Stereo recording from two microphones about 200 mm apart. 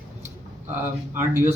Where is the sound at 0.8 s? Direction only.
10° right (ahead or behind).